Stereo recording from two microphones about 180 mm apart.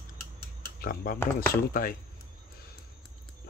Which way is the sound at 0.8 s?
55° left (ahead or behind).